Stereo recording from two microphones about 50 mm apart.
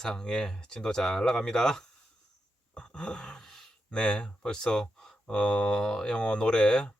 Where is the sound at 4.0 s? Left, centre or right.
Centre.